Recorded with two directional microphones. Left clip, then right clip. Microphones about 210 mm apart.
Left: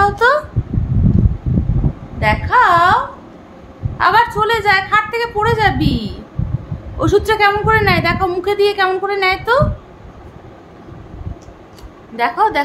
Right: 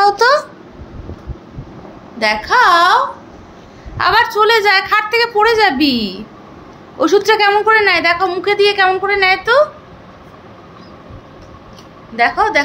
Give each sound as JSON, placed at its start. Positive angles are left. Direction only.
{"t": 0.0, "sound": "a sound", "side_deg": -20}
{"t": 2.1, "sound": "speech", "side_deg": -20}
{"t": 4.0, "sound": "a woman's voice", "side_deg": -15}
{"t": 7.0, "sound": "speech", "side_deg": 0}
{"t": 12.2, "sound": "a woman's voice", "side_deg": 10}